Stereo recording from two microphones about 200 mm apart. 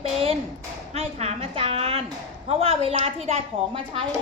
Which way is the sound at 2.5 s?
30° right (ahead or behind).